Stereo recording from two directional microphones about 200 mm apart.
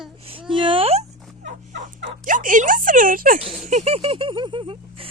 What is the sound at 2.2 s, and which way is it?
Speech, 40° right (ahead or behind).